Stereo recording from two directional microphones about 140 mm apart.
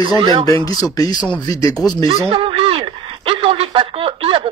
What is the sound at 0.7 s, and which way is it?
Speech, 25° left (ahead or behind).